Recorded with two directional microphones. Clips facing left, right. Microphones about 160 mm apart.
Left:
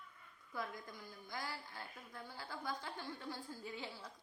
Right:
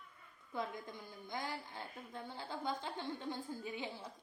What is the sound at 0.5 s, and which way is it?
Speech, 20° right (ahead or behind).